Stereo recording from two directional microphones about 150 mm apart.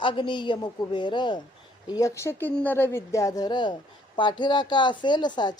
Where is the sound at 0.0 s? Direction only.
35° left (ahead or behind).